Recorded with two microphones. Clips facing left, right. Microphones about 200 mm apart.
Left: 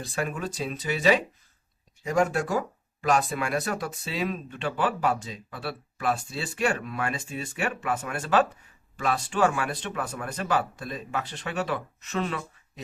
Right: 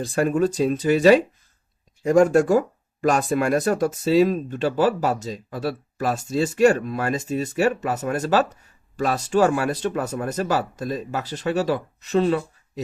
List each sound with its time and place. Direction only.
0.0 s speech: 45° right (ahead or behind)